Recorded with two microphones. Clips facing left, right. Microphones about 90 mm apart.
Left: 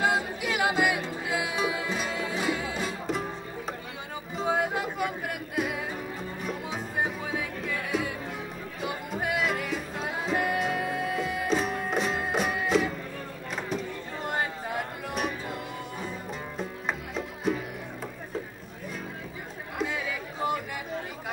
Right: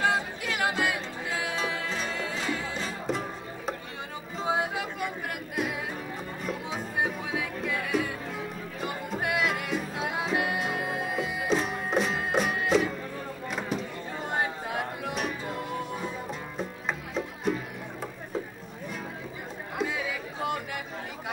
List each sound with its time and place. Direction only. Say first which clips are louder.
0.0 s music: left 1 dB; 15° left (ahead or behind)
3.1 s music: even; centre (ahead or behind)
4.4 s a sound: left 1 dB; centre (ahead or behind)
6.4 s music: right 1 dB; centre (ahead or behind)
14.3 s music: right 1 dB; centre (ahead or behind)
16.5 s music: left 1 dB; centre (ahead or behind)
19.8 s a sound: even; centre (ahead or behind)